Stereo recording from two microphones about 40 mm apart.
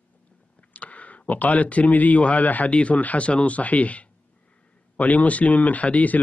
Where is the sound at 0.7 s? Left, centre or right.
Left.